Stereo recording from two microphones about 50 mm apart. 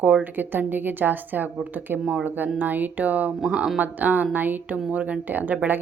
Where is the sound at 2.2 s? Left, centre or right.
Right.